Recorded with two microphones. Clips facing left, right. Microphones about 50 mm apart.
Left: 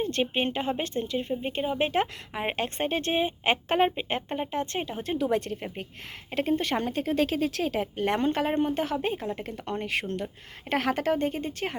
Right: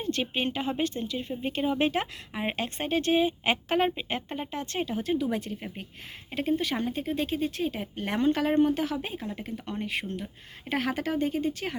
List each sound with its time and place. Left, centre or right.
0.0 s speech: left
1.3 s speech: centre
1.8 s speech: left
5.1 s speech: left
10.7 s speech: left